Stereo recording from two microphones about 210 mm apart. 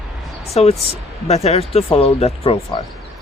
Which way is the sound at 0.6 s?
30° left (ahead or behind).